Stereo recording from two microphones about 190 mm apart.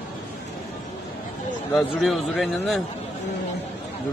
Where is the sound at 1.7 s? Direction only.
5° left (ahead or behind).